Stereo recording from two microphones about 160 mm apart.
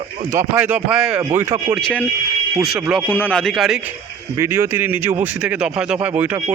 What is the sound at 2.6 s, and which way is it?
Speech, centre (ahead or behind).